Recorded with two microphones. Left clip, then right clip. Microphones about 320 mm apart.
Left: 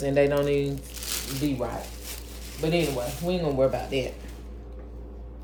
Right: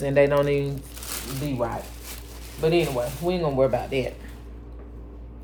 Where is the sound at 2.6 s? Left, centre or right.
Centre.